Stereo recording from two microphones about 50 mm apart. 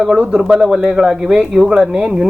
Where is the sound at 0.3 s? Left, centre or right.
Centre.